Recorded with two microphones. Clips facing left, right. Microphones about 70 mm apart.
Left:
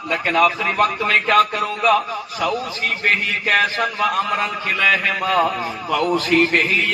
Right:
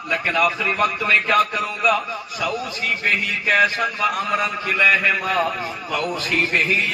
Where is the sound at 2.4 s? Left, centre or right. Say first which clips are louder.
Left 3 dB; left.